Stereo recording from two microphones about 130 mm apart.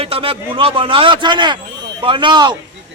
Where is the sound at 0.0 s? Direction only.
45° right (ahead or behind).